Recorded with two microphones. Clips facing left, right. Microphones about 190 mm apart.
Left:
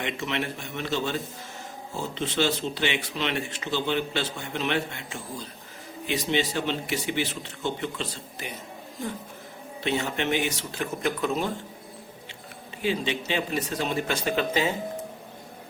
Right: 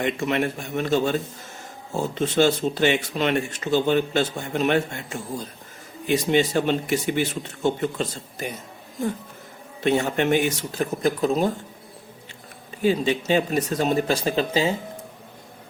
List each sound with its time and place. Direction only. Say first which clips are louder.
0.0 s speech: right 7 dB; 50° right (ahead or behind)
9.8 s speech: right 6 dB; 50° right (ahead or behind)
12.8 s speech: right 6 dB; 40° right (ahead or behind)